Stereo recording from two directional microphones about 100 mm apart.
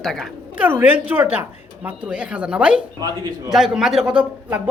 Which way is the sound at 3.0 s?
40° right (ahead or behind).